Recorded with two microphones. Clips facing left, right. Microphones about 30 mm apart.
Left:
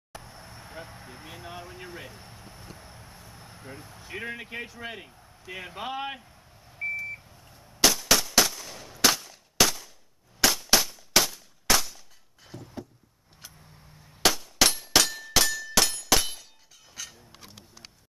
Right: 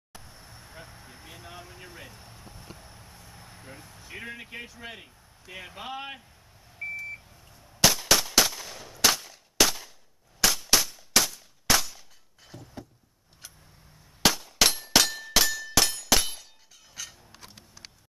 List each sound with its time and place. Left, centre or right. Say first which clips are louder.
0.1 s vehicle: left 4 dB; centre
0.7 s speech: left 5 dB; centre
6.8 s beep: left 3 dB; centre
7.8 s gunshot: even; centre
8.4 s machine gun: even; centre
8.8 s gunshot: left 1 dB; centre
12.4 s a sound: left 3 dB; centre
14.2 s clang: even; centre
16.9 s a sound: even; centre